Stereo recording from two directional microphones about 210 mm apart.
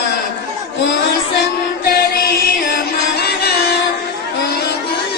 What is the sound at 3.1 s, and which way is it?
Music, 50° left (ahead or behind).